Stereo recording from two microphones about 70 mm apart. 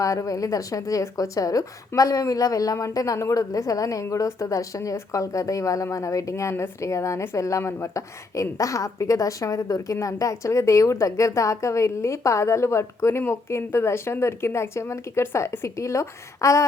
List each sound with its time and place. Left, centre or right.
0.0 s a woman's voice: left